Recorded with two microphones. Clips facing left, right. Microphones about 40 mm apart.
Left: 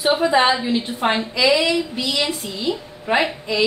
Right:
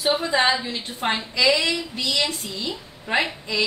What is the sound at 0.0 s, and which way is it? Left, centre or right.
A woman's voice, centre.